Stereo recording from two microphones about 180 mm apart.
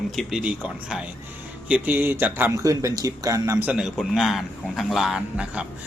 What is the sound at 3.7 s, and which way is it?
A man's voice, 5° right (ahead or behind).